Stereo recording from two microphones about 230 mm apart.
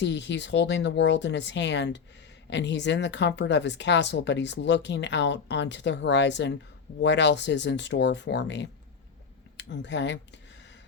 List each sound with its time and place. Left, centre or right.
0.0 s speech: left